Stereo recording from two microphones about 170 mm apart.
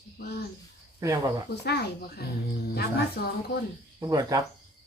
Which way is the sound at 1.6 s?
70° left (ahead or behind).